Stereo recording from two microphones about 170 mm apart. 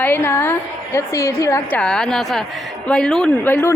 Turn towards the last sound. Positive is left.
turn(degrees=10)  # may be behind; listen again after turning